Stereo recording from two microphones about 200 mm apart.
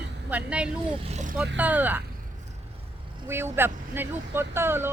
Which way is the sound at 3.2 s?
10° right (ahead or behind).